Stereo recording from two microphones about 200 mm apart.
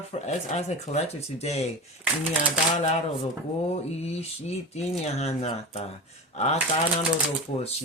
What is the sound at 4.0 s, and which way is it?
Speech, 35° left (ahead or behind).